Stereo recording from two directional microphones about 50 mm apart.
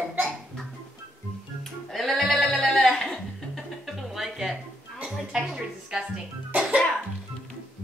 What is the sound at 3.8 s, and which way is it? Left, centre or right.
Music, centre.